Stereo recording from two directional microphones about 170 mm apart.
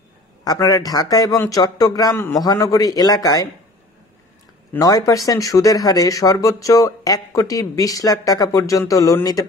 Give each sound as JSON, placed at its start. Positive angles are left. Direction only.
{"t": 0.4, "sound": "speech", "side_deg": 20}
{"t": 4.7, "sound": "speech", "side_deg": 20}